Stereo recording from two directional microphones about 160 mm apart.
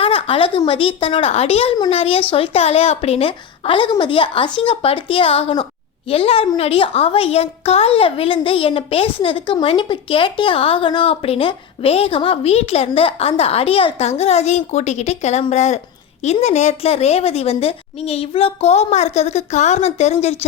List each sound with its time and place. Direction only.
0.0 s a woman's voice: 35° left (ahead or behind)